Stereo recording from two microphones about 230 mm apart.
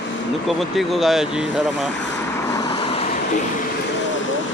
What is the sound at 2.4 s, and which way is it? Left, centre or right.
Vehicle, centre.